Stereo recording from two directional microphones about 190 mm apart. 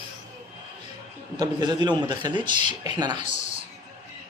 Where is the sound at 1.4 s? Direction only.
20° right (ahead or behind).